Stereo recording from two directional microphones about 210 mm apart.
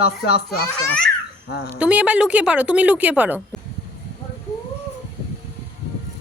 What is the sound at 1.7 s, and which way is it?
A woman's voice, 5° right (ahead or behind).